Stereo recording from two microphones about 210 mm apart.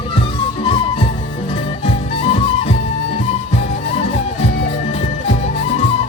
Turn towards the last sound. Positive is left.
turn(degrees=30)  # may be behind; listen again after turning